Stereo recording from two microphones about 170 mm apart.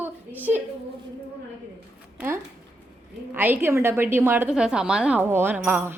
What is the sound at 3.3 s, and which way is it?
A woman's voice, 10° right (ahead or behind).